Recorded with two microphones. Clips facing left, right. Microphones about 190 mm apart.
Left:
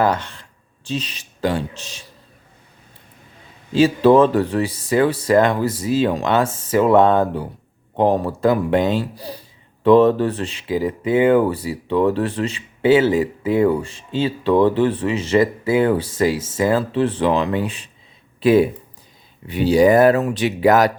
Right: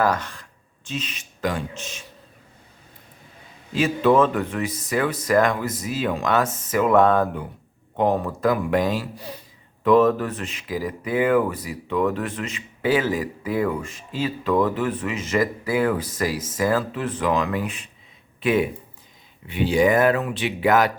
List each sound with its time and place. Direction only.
0.0 s speech: 25° left (ahead or behind)
3.7 s speech: 30° left (ahead or behind)